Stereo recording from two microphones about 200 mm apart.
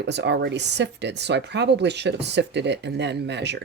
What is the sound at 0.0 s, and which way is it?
Speech, 60° right (ahead or behind).